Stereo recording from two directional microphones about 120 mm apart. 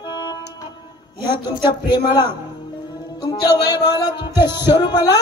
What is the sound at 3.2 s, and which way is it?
Music, 35° left (ahead or behind).